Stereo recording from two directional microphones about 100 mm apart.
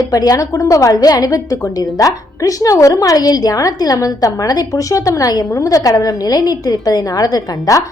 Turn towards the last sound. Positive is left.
turn(degrees=35)  # may be behind; listen again after turning